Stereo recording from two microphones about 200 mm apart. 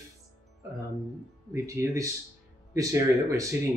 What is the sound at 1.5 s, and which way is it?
Speech, 15° right (ahead or behind).